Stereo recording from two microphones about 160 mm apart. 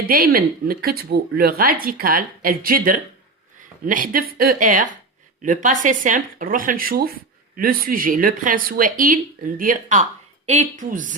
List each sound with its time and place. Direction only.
0.0 s speech: 65° right (ahead or behind); by 11.0 s 50° right (ahead or behind)